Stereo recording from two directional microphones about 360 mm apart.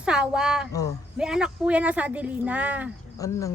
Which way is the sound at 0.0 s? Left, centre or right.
Centre.